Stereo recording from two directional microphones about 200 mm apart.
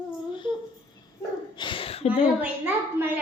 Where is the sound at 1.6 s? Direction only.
25° left (ahead or behind).